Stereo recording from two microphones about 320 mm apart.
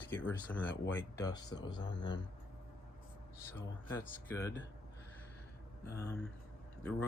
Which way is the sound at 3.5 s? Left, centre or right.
Centre.